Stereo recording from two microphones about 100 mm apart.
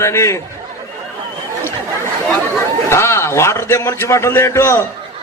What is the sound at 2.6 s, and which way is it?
A man's voice, 25° left (ahead or behind).